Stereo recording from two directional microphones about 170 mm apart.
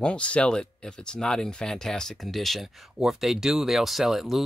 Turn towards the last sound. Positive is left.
turn(degrees=0)  # may be behind; listen again after turning